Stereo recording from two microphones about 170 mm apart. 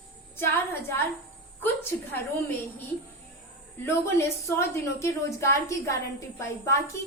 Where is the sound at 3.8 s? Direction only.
15° left (ahead or behind).